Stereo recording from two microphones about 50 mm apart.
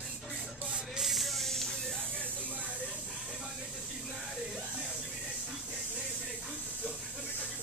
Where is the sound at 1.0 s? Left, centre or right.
Centre.